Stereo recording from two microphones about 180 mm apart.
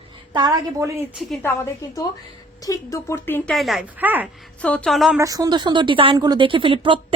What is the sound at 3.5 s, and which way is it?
Speech, centre (ahead or behind).